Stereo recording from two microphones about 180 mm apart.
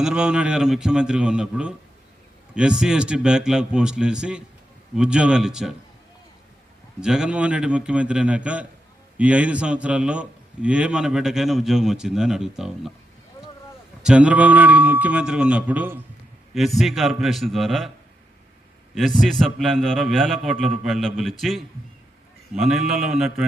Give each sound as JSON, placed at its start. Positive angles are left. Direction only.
{"t": 0.0, "sound": "a man's voice", "side_deg": -5}
{"t": 7.0, "sound": "a man's voice", "side_deg": -5}
{"t": 14.0, "sound": "a man's voice", "side_deg": -5}
{"t": 18.9, "sound": "a man's voice", "side_deg": 0}